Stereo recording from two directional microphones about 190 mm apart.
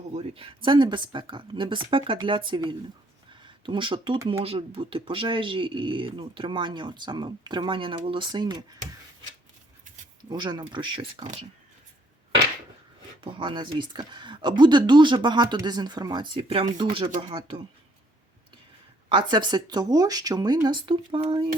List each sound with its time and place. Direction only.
0.1 s speech: 30° right (ahead or behind)
10.2 s speech: 25° right (ahead or behind)
13.2 s speech: 25° right (ahead or behind)
19.0 s speech: 25° right (ahead or behind)